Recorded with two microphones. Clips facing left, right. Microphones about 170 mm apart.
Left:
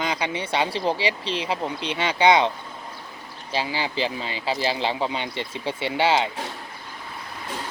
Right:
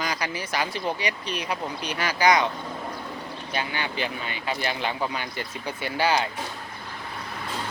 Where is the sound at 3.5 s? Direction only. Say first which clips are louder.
Left 4 dB; 30° left (ahead or behind).